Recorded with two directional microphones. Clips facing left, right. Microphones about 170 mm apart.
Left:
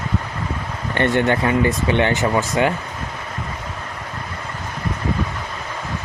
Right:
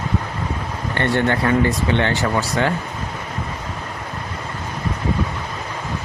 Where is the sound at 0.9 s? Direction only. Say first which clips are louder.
Left 2 dB; 20° left (ahead or behind).